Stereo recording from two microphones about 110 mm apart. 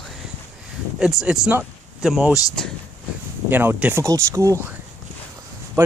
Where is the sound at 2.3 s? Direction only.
30° left (ahead or behind).